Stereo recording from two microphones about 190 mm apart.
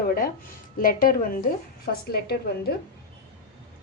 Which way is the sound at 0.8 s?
50° left (ahead or behind).